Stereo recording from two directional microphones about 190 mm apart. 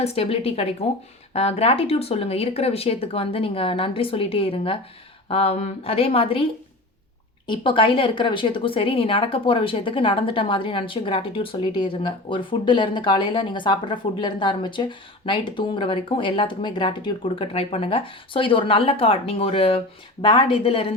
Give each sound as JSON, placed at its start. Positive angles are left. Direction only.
{"t": 0.0, "sound": "speech", "side_deg": 30}